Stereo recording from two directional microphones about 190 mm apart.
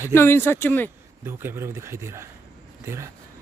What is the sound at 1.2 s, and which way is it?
Speech, 10° right (ahead or behind).